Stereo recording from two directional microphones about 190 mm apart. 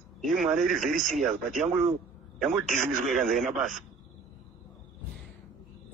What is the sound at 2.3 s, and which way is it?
Speech, centre (ahead or behind).